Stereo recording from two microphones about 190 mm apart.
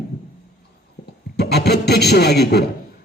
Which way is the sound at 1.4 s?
60° left (ahead or behind).